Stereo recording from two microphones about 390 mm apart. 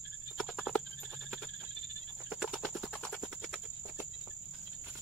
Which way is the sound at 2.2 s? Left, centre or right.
Centre.